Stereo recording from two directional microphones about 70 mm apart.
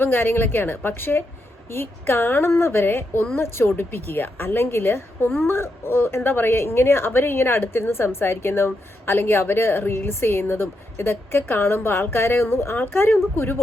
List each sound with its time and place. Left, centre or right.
0.0 s speech: left